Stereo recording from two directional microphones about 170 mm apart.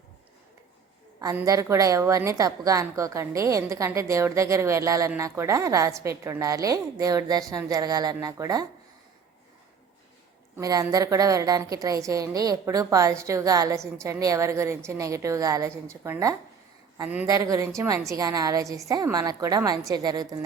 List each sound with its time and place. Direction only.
1.2 s a woman's voice: 20° right (ahead or behind)
10.6 s a woman's voice: 20° right (ahead or behind)